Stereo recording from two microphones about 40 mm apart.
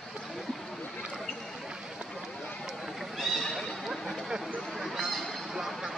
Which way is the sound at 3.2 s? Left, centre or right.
Centre.